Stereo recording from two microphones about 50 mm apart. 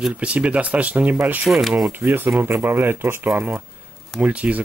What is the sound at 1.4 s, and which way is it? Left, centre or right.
Speech, centre.